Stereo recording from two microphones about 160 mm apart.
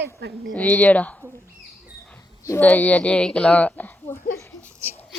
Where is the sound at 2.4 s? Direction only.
15° left (ahead or behind).